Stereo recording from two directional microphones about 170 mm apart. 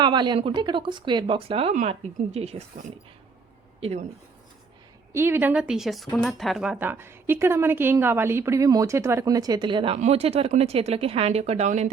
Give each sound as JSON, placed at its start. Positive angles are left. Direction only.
{"t": 0.0, "sound": "speech", "side_deg": -25}
{"t": 5.1, "sound": "speech", "side_deg": -15}